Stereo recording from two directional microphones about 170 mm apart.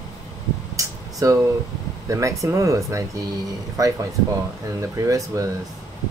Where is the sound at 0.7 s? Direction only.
20° right (ahead or behind).